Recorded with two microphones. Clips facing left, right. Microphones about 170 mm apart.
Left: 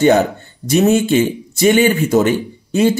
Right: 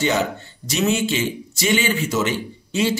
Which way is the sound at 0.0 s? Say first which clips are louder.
Left 9 dB; 50° left (ahead or behind).